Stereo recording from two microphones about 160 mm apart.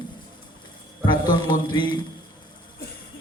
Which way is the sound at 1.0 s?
30° left (ahead or behind).